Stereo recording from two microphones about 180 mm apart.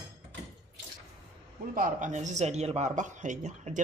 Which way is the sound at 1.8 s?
45° right (ahead or behind).